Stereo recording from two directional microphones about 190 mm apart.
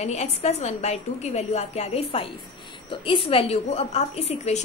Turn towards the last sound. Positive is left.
turn(degrees=35)  # may be behind; listen again after turning